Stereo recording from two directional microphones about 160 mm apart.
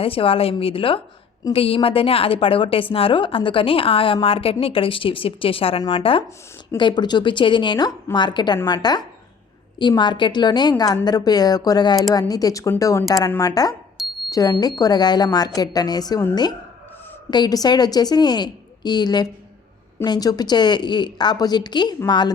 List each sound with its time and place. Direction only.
0.0 s a woman's voice: 35° left (ahead or behind)